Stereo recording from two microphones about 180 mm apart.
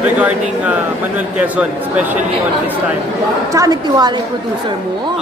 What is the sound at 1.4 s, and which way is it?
Speech, 5° right (ahead or behind).